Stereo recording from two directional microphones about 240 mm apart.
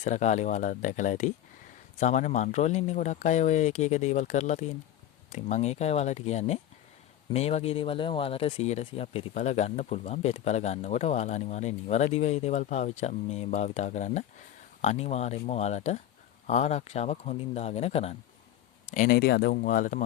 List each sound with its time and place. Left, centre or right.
0.0 s speech: left